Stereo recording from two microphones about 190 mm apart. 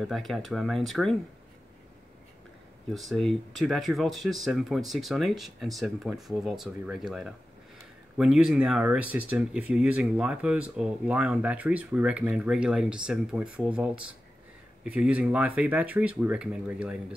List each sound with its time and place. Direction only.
0.0 s speech: centre (ahead or behind)
2.9 s speech: centre (ahead or behind)